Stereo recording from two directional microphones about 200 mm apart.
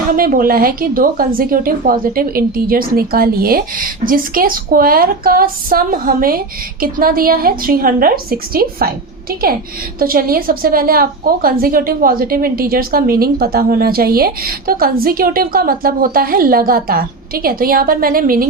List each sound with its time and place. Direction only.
0.2 s a woman's voice: 45° right (ahead or behind)
10.0 s a woman's voice: 45° right (ahead or behind)